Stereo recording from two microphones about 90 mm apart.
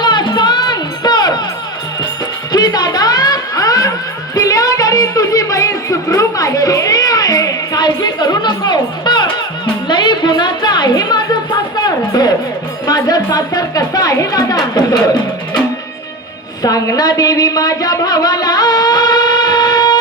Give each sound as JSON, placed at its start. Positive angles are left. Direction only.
{"t": 0.0, "sound": "music", "side_deg": 55}
{"t": 2.5, "sound": "music", "side_deg": 50}
{"t": 12.9, "sound": "a woman's voice", "side_deg": 50}
{"t": 16.6, "sound": "a woman's voice", "side_deg": 40}